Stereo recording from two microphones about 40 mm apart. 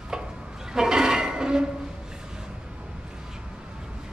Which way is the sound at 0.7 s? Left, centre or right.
Centre.